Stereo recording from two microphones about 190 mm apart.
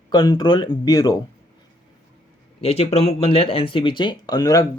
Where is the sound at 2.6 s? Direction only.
30° left (ahead or behind).